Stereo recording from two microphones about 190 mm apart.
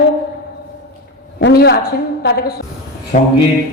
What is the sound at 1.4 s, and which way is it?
A woman's voice, 60° left (ahead or behind).